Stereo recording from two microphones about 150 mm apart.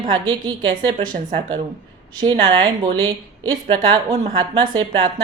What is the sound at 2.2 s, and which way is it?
A woman's voice, 35° right (ahead or behind).